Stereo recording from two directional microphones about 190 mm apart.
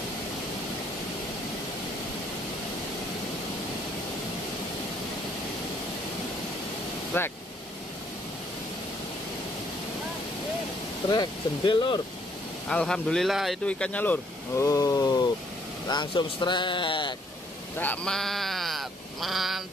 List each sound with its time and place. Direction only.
7.1 s speech: 10° left (ahead or behind)
11.1 s speech: 25° left (ahead or behind)
12.6 s speech: 5° left (ahead or behind); by 17.1 s 25° left (ahead or behind)
17.7 s speech: 5° left (ahead or behind)